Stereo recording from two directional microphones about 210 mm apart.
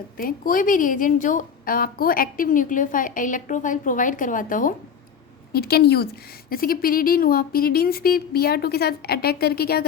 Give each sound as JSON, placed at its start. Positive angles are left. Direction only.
{"t": 0.2, "sound": "a woman's voice", "side_deg": 40}